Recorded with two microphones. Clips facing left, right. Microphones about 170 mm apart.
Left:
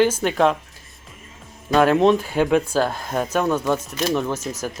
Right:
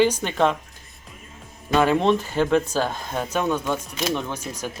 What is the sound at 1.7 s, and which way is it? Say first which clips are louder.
Speech: left 3 dB; centre (ahead or behind).